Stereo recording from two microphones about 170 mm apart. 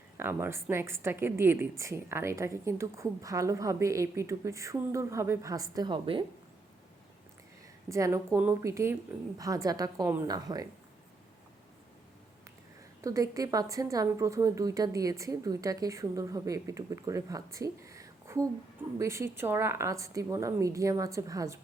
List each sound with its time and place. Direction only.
0.2 s a woman's voice: 15° right (ahead or behind); by 6.2 s 30° right (ahead or behind)
7.9 s a woman's voice: 20° right (ahead or behind)
13.0 s a woman's voice: 20° right (ahead or behind)